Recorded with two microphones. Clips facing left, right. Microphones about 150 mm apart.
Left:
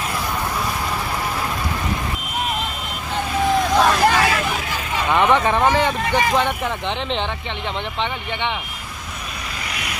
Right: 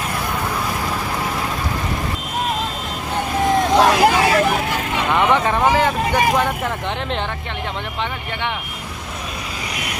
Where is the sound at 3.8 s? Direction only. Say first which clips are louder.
Right 2 dB; 15° right (ahead or behind).